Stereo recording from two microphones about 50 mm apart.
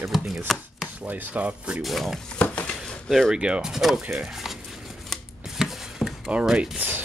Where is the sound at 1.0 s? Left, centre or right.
Right.